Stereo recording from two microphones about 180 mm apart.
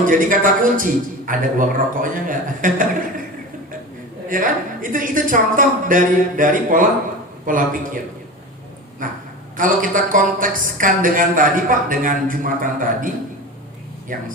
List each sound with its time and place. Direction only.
0.0 s a woman's voice: 50° right (ahead or behind)
4.3 s a woman's voice: 50° right (ahead or behind)
9.0 s a woman's voice: 50° right (ahead or behind)
14.1 s a woman's voice: 45° right (ahead or behind)